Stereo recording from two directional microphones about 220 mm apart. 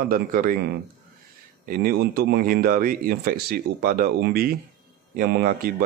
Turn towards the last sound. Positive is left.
turn(degrees=-45)  # may be behind; listen again after turning